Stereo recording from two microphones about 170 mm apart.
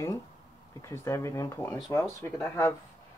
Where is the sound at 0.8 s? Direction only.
15° left (ahead or behind).